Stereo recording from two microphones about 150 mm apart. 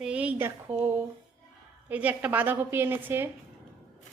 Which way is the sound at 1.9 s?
10° right (ahead or behind).